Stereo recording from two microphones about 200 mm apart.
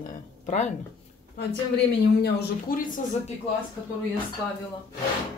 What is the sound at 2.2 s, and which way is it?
Speech, 45° left (ahead or behind).